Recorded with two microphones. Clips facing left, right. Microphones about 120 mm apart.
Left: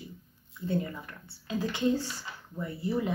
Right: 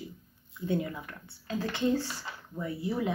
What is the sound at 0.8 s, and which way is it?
Speech, 10° right (ahead or behind).